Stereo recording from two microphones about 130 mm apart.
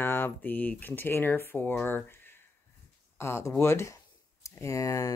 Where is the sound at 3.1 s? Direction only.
20° left (ahead or behind).